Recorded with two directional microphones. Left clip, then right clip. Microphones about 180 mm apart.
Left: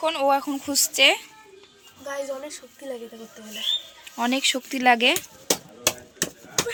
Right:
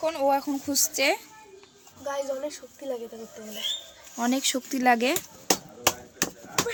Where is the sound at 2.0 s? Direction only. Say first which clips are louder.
Right 1 dB; 20° right (ahead or behind).